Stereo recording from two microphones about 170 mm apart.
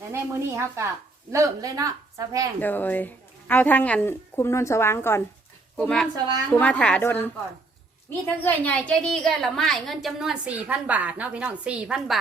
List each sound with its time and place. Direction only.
0.1 s speech: 15° right (ahead or behind)
2.6 s a woman's voice: 10° left (ahead or behind)
8.4 s a woman's voice: 10° left (ahead or behind)